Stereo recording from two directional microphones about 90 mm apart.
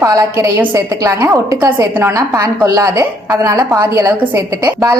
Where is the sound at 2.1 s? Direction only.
40° right (ahead or behind).